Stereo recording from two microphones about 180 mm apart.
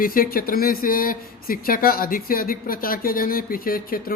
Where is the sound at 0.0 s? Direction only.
50° left (ahead or behind).